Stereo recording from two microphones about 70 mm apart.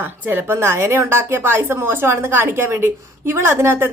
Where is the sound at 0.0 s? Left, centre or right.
Right.